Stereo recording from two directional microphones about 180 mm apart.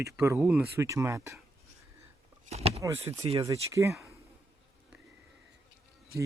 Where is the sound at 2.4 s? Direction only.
35° right (ahead or behind).